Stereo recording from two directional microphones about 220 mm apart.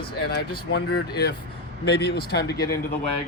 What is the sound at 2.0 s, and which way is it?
Speech, 45° left (ahead or behind).